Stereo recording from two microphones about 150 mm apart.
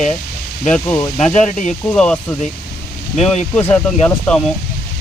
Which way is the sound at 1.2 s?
50° left (ahead or behind).